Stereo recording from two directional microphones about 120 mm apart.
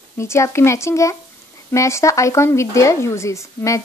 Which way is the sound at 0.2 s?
25° left (ahead or behind).